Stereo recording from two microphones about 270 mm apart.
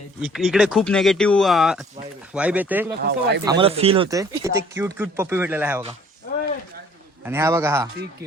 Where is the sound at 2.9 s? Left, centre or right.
Right.